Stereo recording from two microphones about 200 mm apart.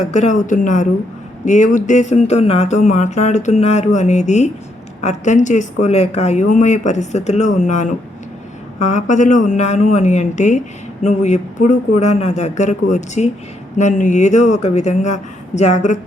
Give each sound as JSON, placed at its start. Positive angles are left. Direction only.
{"t": 0.0, "sound": "speech", "side_deg": 35}